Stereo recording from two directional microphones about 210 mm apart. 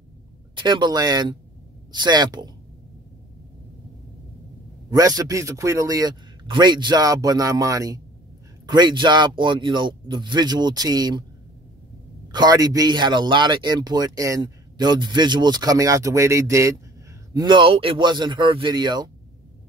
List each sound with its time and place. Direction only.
0.6 s speech: 20° right (ahead or behind)
4.9 s a man's voice: 15° right (ahead or behind)
12.3 s speech: 20° right (ahead or behind)